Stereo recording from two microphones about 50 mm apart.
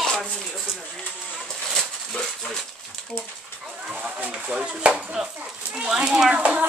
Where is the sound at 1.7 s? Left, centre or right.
Centre.